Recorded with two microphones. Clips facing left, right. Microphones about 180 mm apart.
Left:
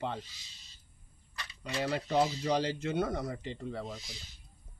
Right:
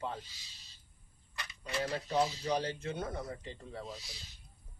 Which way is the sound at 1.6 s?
80° left.